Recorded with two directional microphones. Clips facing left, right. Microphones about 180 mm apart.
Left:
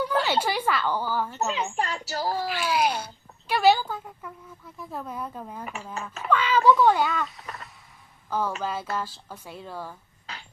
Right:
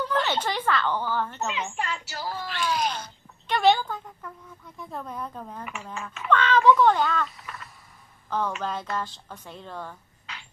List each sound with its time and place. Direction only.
0.0 s a woman's voice: 10° left (ahead or behind)
1.7 s speech: 40° left (ahead or behind)
2.5 s speech: 10° left (ahead or behind)